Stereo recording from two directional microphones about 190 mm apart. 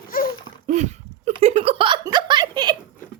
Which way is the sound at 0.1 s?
50° left (ahead or behind).